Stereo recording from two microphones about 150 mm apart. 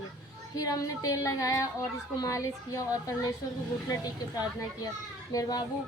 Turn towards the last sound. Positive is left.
turn(degrees=25)  # may be behind; listen again after turning